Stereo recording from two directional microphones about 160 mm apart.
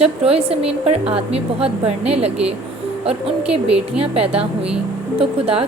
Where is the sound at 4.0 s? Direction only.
35° right (ahead or behind).